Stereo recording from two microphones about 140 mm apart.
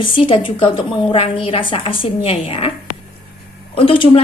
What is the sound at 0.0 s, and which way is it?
A woman's voice, 35° left (ahead or behind).